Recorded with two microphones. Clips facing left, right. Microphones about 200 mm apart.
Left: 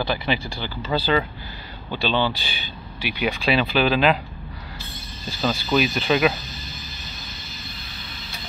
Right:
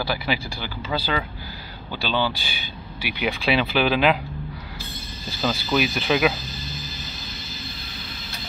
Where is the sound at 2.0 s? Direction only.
10° right (ahead or behind).